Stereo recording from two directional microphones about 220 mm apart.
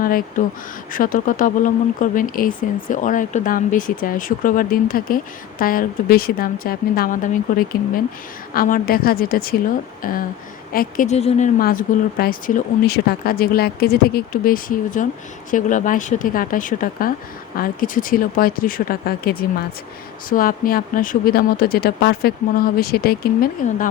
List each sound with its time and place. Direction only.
0.0 s a woman's voice: 40° left (ahead or behind)